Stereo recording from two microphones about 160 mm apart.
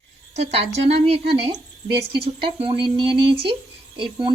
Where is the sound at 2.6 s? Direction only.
35° right (ahead or behind).